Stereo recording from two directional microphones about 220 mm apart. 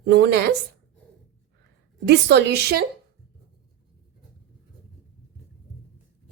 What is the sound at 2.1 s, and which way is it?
Speech, 50° right (ahead or behind).